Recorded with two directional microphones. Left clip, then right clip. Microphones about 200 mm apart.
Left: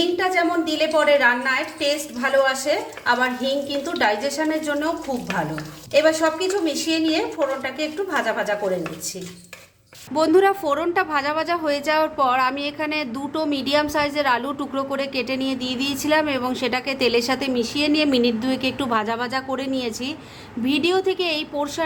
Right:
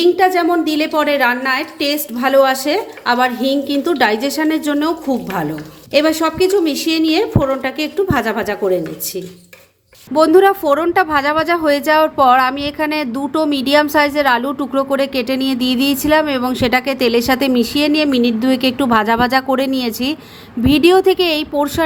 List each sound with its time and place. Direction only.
0.0 s a woman's voice: 35° right (ahead or behind)
5.9 s a woman's voice: 40° right (ahead or behind)
10.2 s a woman's voice: 15° right (ahead or behind)